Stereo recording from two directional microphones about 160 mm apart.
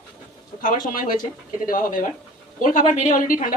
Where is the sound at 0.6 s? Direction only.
60° left (ahead or behind).